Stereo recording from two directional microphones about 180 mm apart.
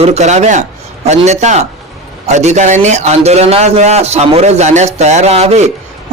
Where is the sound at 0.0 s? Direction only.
40° right (ahead or behind).